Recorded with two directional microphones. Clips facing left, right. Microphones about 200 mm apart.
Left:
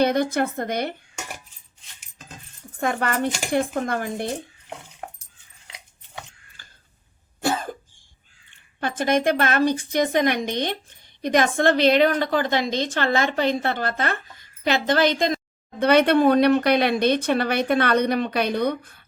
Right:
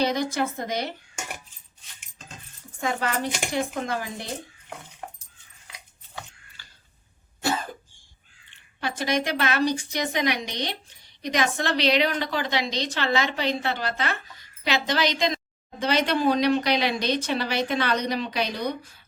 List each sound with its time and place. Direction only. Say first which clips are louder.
0.0 s speech: left 4 dB; 55° left (ahead or behind)
2.8 s speech: left 4 dB; 55° left (ahead or behind)
6.6 s tick-tock: left 2 dB; 50° left (ahead or behind)
7.4 s cough: left 3 dB; 50° left (ahead or behind)
8.4 s a woman's voice: left 3 dB; 50° left (ahead or behind)